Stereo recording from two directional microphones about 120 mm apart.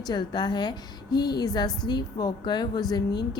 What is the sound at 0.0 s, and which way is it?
A woman's voice, 35° left (ahead or behind).